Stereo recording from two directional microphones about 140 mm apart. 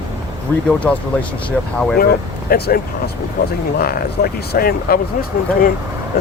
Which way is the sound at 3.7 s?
90° left.